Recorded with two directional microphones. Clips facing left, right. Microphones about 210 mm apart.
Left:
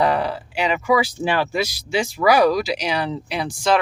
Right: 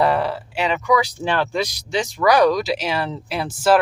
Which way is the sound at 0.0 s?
Centre (ahead or behind).